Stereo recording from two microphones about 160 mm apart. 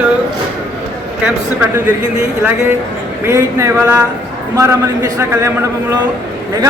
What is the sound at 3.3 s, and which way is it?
A man's voice, 15° right (ahead or behind).